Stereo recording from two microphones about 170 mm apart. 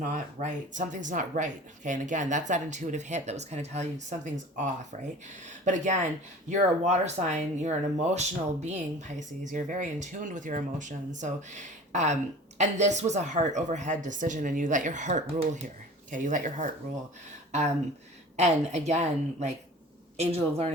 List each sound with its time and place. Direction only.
0.0 s speech: 45° right (ahead or behind)
18.3 s a woman's voice: 40° right (ahead or behind)